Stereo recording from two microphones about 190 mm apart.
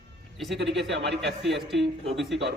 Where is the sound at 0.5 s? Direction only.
65° right (ahead or behind).